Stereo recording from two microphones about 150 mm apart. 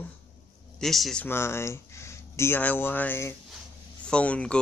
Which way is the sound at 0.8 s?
Centre (ahead or behind).